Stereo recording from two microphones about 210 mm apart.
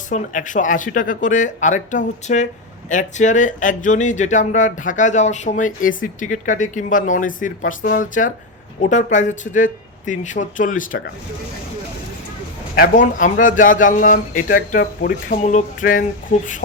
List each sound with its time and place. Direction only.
0.1 s speech: 35° left (ahead or behind)
12.7 s speech: 40° left (ahead or behind)